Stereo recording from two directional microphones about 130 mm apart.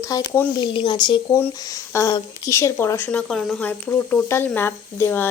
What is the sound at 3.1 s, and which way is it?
A woman's voice, 5° left (ahead or behind).